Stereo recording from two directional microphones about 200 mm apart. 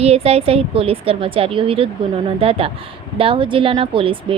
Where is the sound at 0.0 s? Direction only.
30° right (ahead or behind).